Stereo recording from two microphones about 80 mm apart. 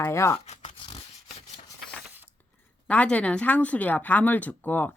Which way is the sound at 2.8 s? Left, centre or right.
Centre.